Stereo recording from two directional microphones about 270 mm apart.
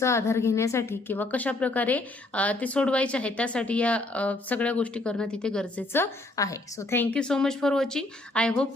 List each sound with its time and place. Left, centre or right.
0.0 s a woman's voice: centre